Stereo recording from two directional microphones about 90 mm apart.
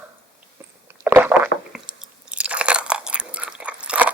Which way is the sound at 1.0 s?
25° right (ahead or behind).